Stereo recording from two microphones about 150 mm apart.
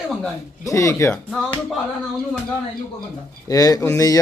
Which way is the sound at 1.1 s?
10° left (ahead or behind).